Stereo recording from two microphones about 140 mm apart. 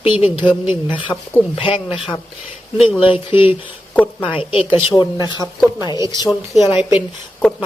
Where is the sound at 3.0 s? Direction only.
35° left (ahead or behind).